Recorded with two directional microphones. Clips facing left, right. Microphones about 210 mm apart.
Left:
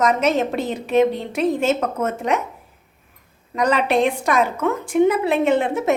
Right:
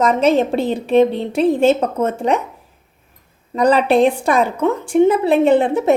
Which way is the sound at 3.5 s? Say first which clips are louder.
Right 5 dB; 35° right (ahead or behind).